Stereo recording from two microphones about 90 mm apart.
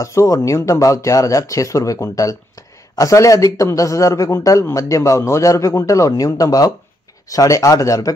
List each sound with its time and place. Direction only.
0.0 s speech: 35° left (ahead or behind)